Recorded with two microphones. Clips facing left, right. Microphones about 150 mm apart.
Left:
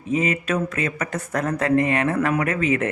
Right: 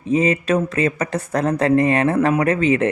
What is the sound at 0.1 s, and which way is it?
Speech, 35° right (ahead or behind).